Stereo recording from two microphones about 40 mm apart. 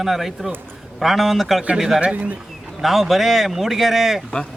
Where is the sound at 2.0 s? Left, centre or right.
Right.